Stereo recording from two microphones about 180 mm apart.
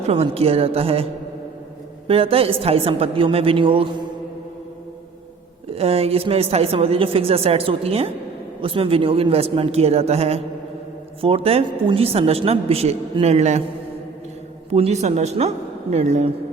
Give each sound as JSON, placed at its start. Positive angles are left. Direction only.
{"t": 0.1, "sound": "a woman's voice", "side_deg": -35}
{"t": 2.0, "sound": "a woman's voice", "side_deg": -30}
{"t": 5.7, "sound": "a woman's voice", "side_deg": -35}
{"t": 14.7, "sound": "a woman's voice", "side_deg": -35}